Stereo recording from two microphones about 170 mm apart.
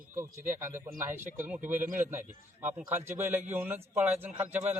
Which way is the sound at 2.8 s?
15° right (ahead or behind).